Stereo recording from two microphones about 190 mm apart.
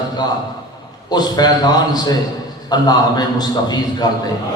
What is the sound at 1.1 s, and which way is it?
A man's voice, 20° left (ahead or behind).